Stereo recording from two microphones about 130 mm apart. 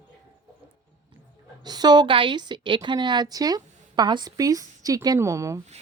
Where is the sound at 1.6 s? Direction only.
30° right (ahead or behind).